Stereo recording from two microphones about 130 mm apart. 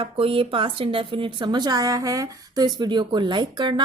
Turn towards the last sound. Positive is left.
turn(degrees=-35)  # may be behind; listen again after turning